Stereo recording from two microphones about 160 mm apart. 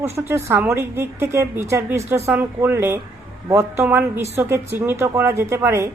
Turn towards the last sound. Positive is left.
turn(degrees=-15)  # may be behind; listen again after turning